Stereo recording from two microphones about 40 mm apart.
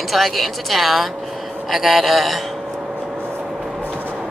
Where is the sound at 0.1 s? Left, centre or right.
Centre.